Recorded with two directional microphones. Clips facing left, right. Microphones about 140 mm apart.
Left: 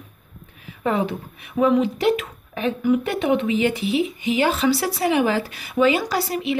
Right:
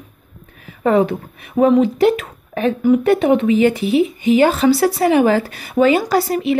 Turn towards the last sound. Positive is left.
turn(degrees=-45)  # may be behind; listen again after turning